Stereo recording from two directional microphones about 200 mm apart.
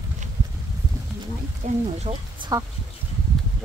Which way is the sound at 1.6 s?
35° right (ahead or behind).